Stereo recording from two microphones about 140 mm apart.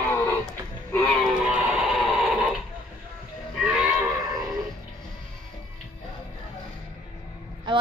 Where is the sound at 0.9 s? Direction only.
10° left (ahead or behind).